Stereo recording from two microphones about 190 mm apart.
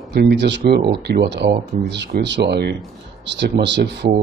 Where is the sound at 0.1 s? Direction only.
60° right (ahead or behind).